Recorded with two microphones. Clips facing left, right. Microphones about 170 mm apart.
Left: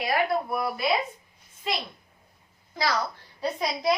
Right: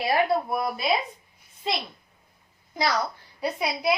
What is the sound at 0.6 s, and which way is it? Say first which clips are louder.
Speech: even; 20° right (ahead or behind).